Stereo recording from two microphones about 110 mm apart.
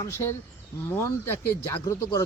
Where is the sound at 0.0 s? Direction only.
25° left (ahead or behind).